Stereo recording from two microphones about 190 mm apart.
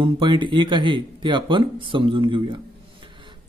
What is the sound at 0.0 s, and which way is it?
Speech, 25° right (ahead or behind).